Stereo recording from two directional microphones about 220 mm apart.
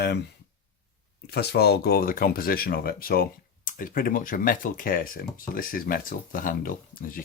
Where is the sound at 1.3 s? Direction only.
45° left (ahead or behind).